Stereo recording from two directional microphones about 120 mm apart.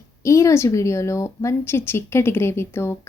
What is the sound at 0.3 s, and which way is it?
A woman's voice, 25° left (ahead or behind).